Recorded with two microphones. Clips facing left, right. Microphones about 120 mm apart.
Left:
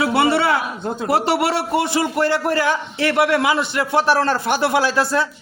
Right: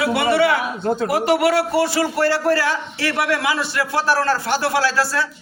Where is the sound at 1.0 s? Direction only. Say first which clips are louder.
Even; 30° left (ahead or behind).